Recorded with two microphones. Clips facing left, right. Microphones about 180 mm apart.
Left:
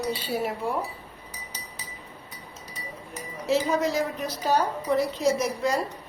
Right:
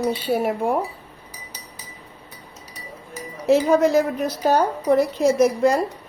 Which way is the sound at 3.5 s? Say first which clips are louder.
Right 8 dB; 50° right (ahead or behind).